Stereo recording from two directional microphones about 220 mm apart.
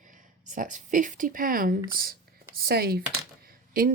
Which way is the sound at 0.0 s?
35° right (ahead or behind).